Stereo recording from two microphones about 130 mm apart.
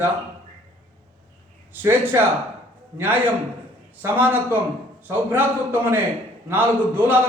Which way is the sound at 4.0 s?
15° right (ahead or behind).